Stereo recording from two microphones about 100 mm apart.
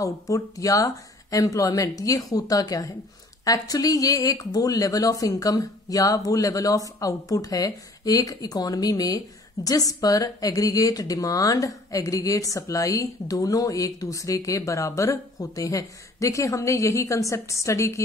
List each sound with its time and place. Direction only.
0.0 s speech: 35° left (ahead or behind)